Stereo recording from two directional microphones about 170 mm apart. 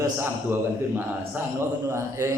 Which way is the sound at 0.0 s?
15° right (ahead or behind).